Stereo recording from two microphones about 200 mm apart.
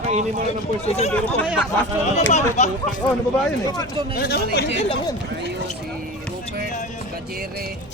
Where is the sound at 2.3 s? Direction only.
35° left (ahead or behind).